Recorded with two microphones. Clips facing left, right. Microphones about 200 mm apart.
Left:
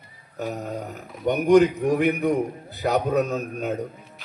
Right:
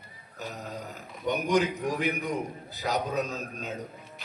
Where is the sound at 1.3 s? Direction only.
60° left (ahead or behind).